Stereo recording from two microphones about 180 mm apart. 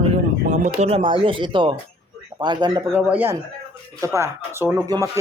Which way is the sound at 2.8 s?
10° right (ahead or behind).